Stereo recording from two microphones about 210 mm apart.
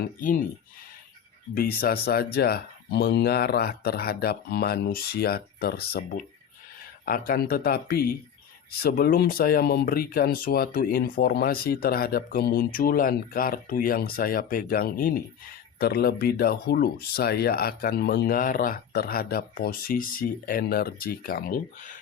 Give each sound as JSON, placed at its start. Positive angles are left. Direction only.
{"t": 0.0, "sound": "speech", "side_deg": 40}
{"t": 1.5, "sound": "speech", "side_deg": 45}